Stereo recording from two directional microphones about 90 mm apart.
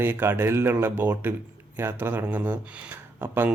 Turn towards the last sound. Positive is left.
turn(degrees=-20)  # may be behind; listen again after turning